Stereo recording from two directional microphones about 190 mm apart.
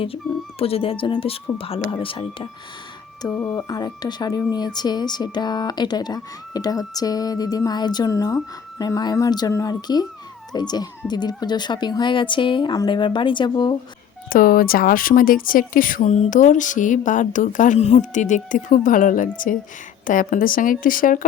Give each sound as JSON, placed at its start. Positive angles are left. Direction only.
{"t": 0.6, "sound": "a woman's voice", "side_deg": 30}
{"t": 3.3, "sound": "speech", "side_deg": 10}
{"t": 3.8, "sound": "a woman's voice", "side_deg": 20}
{"t": 14.3, "sound": "speech", "side_deg": 50}